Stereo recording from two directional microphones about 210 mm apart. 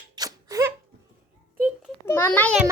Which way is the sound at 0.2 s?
15° right (ahead or behind).